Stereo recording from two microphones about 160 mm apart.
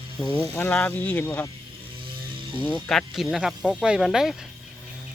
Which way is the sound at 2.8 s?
Centre (ahead or behind).